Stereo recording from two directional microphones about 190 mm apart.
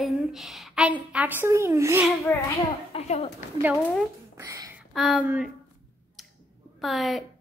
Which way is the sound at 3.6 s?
5° right (ahead or behind).